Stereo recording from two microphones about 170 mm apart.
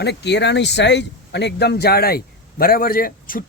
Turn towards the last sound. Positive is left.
turn(degrees=55)  # may be behind; listen again after turning